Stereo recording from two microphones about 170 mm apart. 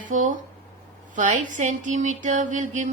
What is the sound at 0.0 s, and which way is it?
Speech, 50° right (ahead or behind).